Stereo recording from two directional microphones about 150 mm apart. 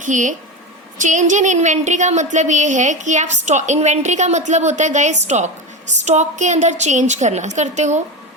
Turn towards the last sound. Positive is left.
turn(degrees=-50)  # may be behind; listen again after turning